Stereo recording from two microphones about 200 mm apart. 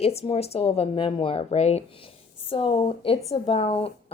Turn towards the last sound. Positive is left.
turn(degrees=30)  # may be behind; listen again after turning